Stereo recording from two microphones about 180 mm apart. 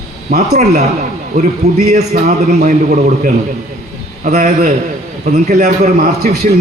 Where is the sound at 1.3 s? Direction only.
45° right (ahead or behind).